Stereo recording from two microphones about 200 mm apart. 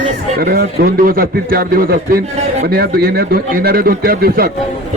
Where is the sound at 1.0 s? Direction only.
45° right (ahead or behind).